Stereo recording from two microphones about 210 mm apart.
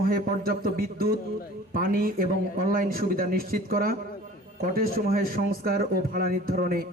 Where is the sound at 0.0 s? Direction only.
45° right (ahead or behind).